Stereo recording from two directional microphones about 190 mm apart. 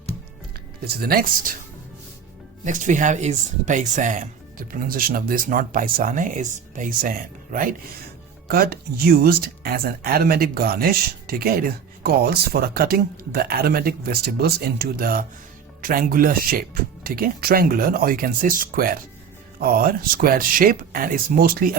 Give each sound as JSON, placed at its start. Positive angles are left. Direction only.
{"t": 0.9, "sound": "speech", "side_deg": -50}
{"t": 2.6, "sound": "speech", "side_deg": -40}